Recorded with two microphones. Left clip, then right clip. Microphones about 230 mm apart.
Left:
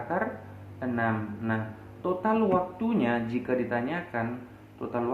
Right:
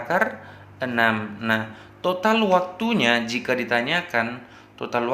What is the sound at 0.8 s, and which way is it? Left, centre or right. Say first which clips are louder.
A man's voice: right 8 dB; right.